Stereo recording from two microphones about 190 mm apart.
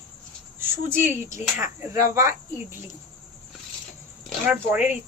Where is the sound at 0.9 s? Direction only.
10° right (ahead or behind).